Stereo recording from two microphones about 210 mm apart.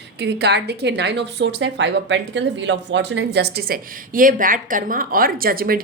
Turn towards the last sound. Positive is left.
turn(degrees=-45)  # may be behind; listen again after turning